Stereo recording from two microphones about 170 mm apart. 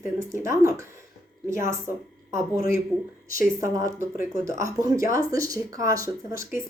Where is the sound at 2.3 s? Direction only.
15° right (ahead or behind).